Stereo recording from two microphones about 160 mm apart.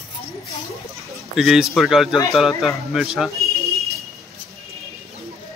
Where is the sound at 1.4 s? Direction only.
Centre (ahead or behind).